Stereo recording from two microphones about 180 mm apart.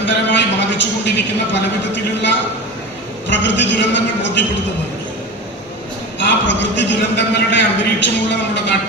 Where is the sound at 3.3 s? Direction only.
85° left.